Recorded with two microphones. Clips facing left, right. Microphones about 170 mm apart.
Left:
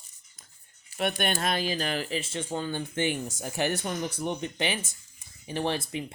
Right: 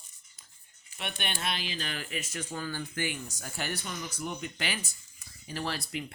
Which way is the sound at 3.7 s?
45° left (ahead or behind).